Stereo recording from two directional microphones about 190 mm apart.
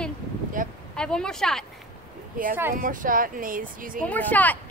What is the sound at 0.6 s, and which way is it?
Speech, 45° right (ahead or behind).